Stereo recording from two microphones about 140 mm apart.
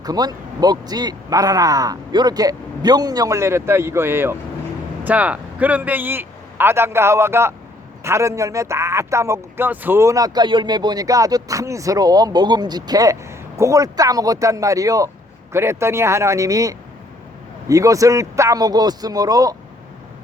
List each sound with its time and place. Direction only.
0.0 s a man's voice: 30° right (ahead or behind)